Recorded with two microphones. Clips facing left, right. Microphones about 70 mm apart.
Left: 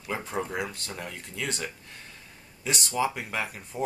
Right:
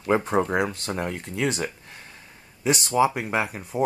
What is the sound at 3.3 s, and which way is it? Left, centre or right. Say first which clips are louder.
Speech: right 7 dB; right.